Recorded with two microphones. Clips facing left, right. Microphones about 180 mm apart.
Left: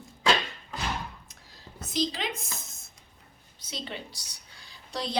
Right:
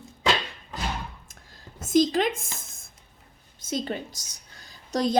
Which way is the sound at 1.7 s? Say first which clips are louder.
Right 10 dB; 45° right (ahead or behind).